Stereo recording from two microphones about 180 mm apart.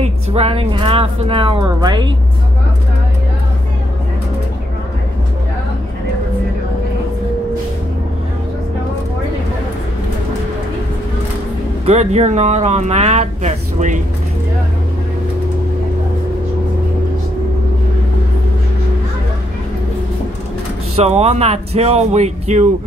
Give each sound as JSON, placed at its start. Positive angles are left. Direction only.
{"t": 0.0, "sound": "speech", "side_deg": -35}
{"t": 11.8, "sound": "speech", "side_deg": -35}
{"t": 20.9, "sound": "speech", "side_deg": -35}